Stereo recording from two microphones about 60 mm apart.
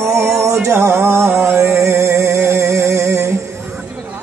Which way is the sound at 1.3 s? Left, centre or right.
Right.